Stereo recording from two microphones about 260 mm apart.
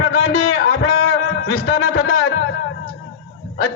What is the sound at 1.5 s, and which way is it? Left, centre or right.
Music, left.